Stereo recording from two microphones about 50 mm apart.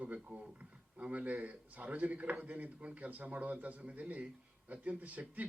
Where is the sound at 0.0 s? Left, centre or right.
Right.